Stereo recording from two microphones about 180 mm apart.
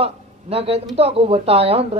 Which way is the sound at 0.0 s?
35° right (ahead or behind).